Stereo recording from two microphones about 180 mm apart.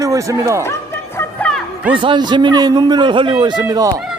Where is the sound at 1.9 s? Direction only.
25° right (ahead or behind).